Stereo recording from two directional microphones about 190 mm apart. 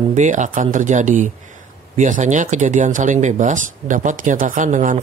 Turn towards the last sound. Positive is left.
turn(degrees=-40)  # may be behind; listen again after turning